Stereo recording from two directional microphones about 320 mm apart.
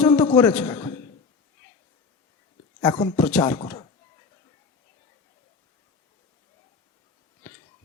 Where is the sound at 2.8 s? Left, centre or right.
Centre.